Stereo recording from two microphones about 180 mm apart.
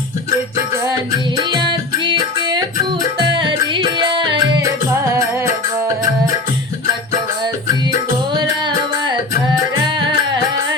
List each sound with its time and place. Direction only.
1.4 s music: 25° right (ahead or behind)
5.1 s music: 15° right (ahead or behind)
9.5 s music: 25° right (ahead or behind)